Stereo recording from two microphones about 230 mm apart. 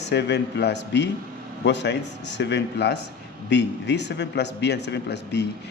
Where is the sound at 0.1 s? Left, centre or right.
Left.